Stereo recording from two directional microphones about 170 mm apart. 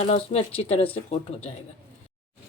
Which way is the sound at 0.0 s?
40° left (ahead or behind).